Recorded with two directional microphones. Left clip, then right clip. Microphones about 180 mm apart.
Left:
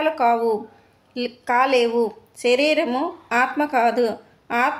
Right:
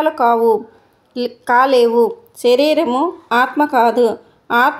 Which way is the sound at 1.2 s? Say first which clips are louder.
Right 6 dB; 30° right (ahead or behind).